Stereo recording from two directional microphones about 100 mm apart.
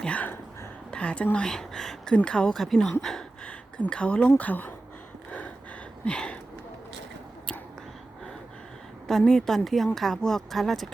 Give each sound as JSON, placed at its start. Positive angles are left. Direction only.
{"t": 0.0, "sound": "a sound", "side_deg": 15}
{"t": 0.9, "sound": "speech", "side_deg": 10}
{"t": 6.1, "sound": "speech", "side_deg": 10}
{"t": 9.0, "sound": "speech", "side_deg": 5}